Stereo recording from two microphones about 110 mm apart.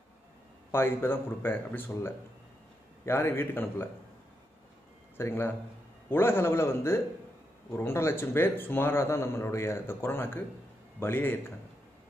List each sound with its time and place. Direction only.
0.7 s a man's voice: 20° left (ahead or behind)
5.1 s a man's voice: 20° left (ahead or behind)